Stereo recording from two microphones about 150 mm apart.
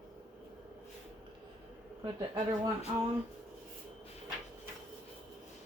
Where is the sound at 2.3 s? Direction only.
25° right (ahead or behind).